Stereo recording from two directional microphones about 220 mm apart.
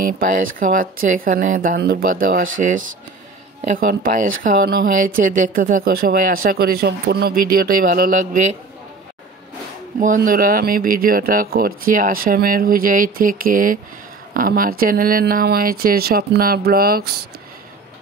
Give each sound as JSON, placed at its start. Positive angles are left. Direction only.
{"t": 0.2, "sound": "speech", "side_deg": -40}
{"t": 3.6, "sound": "speech", "side_deg": -35}
{"t": 9.9, "sound": "speech", "side_deg": -40}